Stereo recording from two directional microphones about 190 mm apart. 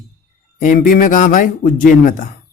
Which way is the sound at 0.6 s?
45° left (ahead or behind).